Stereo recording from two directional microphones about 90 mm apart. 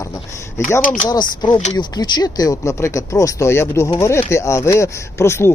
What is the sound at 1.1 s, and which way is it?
Speech, 50° left (ahead or behind).